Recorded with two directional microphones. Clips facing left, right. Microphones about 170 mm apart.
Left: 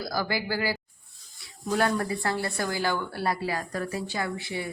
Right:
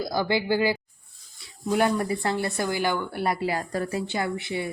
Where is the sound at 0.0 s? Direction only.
20° right (ahead or behind).